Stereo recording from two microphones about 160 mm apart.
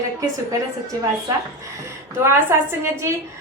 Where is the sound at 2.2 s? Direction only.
15° right (ahead or behind).